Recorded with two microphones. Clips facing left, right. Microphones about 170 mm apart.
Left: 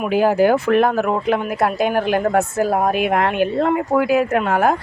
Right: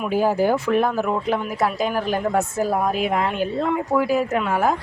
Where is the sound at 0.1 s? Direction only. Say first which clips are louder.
Left 4 dB; 75° left (ahead or behind).